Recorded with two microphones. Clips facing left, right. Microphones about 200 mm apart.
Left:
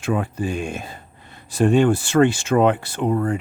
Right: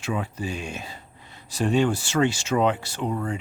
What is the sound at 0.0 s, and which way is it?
Speech, 50° left (ahead or behind).